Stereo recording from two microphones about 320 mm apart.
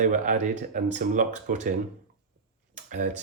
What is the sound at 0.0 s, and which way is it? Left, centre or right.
Speech, right.